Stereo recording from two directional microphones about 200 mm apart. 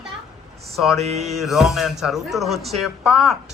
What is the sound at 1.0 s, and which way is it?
Music, 35° right (ahead or behind).